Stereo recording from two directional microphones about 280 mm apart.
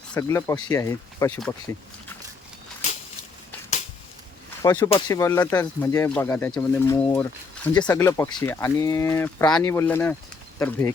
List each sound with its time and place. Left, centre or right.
0.1 s speech: centre
4.6 s speech: centre